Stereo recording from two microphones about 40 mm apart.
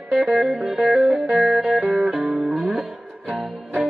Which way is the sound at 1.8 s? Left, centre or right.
Right.